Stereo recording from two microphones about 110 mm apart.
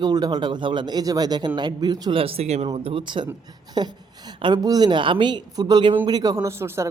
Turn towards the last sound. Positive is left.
turn(degrees=-25)  # may be behind; listen again after turning